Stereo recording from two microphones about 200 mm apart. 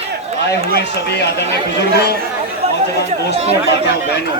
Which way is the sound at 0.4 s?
55° left (ahead or behind).